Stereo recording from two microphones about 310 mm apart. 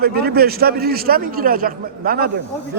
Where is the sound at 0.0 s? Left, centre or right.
Right.